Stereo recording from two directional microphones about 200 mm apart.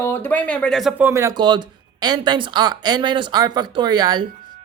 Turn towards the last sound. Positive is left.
turn(degrees=-20)  # may be behind; listen again after turning